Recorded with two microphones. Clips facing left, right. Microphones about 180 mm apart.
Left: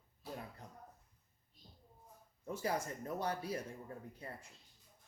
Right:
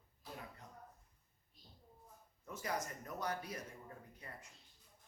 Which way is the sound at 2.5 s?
30° left (ahead or behind).